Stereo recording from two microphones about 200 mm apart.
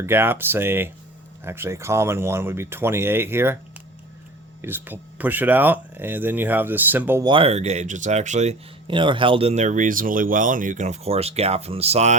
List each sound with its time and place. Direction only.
0.0 s speech: 10° right (ahead or behind)
4.6 s speech: 10° right (ahead or behind)
7.3 s speech: 25° right (ahead or behind)